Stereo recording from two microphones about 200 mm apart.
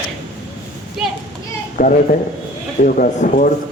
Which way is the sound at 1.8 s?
45° left (ahead or behind).